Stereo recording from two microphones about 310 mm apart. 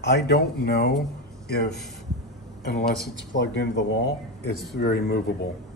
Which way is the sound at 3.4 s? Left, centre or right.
Left.